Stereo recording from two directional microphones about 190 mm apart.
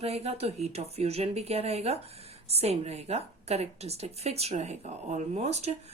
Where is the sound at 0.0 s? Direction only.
35° right (ahead or behind).